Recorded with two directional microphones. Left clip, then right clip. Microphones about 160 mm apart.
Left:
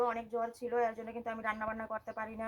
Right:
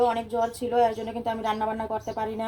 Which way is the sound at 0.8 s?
10° left (ahead or behind).